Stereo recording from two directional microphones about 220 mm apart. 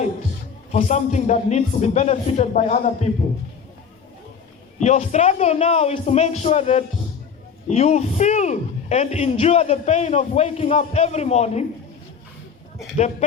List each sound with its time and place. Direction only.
0.7 s speech: 30° left (ahead or behind)
4.8 s speech: 30° left (ahead or behind)